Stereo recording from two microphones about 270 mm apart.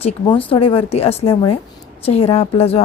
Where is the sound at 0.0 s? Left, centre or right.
Centre.